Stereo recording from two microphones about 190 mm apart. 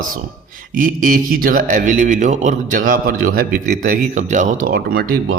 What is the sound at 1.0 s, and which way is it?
A man's voice, 50° right (ahead or behind).